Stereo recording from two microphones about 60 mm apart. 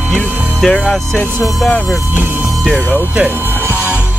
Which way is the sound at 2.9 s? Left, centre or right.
Right.